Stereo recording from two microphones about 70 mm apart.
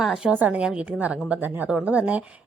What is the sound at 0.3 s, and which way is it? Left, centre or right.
A woman's voice, right.